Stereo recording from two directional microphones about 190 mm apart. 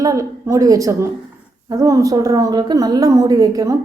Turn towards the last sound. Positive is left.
turn(degrees=-20)  # may be behind; listen again after turning